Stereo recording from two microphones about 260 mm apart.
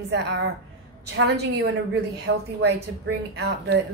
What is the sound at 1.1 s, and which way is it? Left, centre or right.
A woman's voice, right.